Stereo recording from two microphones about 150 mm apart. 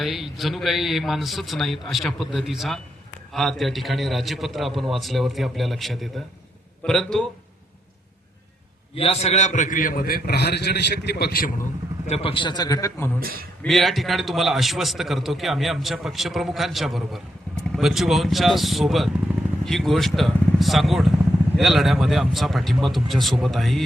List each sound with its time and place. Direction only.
0.0 s a man's voice: centre (ahead or behind)
9.0 s a man's voice: 45° left (ahead or behind); by 11.5 s 85° left
12.0 s a man's voice: 40° left (ahead or behind); by 13.1 s 25° left (ahead or behind)
13.1 s a man's voice: 80° right
13.6 s a man's voice: centre (ahead or behind)